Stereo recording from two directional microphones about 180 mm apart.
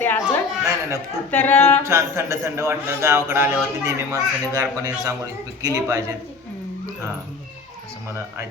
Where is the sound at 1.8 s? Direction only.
15° right (ahead or behind).